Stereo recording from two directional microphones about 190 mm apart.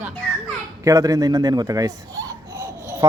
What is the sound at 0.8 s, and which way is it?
Speech, 20° right (ahead or behind).